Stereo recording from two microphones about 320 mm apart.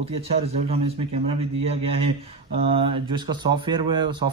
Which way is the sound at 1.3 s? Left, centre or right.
Centre.